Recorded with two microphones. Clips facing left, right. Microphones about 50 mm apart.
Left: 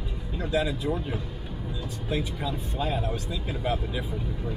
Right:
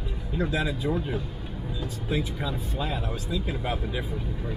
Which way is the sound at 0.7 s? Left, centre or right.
Centre.